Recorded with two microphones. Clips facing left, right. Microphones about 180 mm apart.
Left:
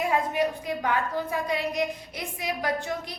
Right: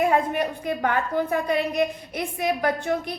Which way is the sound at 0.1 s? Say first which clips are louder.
Right 3 dB; 55° right (ahead or behind).